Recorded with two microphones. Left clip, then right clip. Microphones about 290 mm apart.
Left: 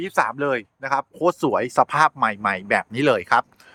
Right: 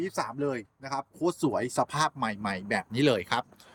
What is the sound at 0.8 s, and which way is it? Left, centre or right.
Speech, centre.